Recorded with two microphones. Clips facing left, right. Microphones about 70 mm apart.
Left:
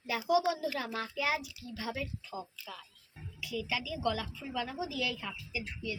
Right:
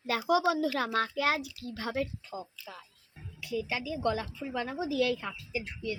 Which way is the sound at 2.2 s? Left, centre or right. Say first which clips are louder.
Right 1 dB; right.